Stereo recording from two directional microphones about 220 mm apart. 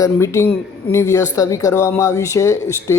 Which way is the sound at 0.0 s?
15° left (ahead or behind).